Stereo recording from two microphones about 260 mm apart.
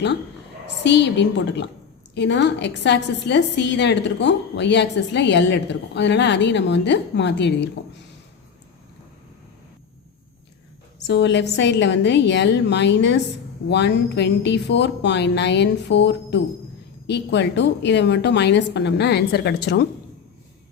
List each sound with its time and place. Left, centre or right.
0.8 s a woman's voice: left
11.0 s a woman's voice: left